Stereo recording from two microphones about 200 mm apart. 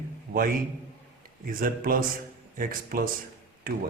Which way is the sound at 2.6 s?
45° right (ahead or behind).